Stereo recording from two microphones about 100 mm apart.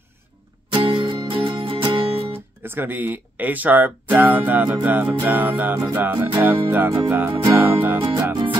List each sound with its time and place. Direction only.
0.7 s music: 55° right (ahead or behind)
2.3 s speech: 20° right (ahead or behind)
4.8 s music: 20° right (ahead or behind)